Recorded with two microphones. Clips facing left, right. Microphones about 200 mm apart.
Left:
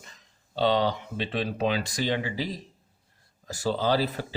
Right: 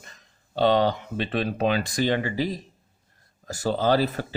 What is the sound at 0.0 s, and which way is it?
Speech, 50° right (ahead or behind).